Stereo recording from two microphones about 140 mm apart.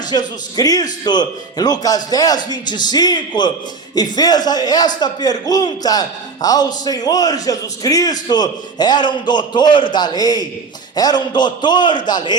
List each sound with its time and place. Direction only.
0.1 s a man's voice: 30° left (ahead or behind)